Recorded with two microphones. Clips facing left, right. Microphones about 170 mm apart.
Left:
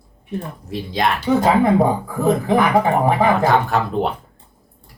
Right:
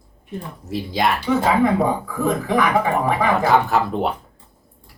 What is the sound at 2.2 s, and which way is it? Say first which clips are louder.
Speech: left 3 dB; 30° left (ahead or behind).